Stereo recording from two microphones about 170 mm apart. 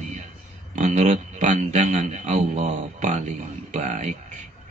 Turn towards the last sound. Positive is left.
turn(degrees=-45)  # may be behind; listen again after turning